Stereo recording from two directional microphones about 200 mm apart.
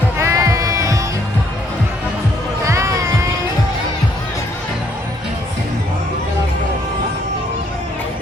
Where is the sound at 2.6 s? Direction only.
15° right (ahead or behind).